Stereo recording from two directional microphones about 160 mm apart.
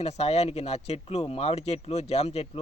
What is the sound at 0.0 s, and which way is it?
Speech, 40° left (ahead or behind).